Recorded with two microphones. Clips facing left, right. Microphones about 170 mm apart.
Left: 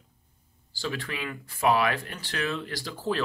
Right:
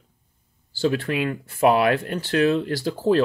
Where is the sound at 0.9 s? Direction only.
50° right (ahead or behind).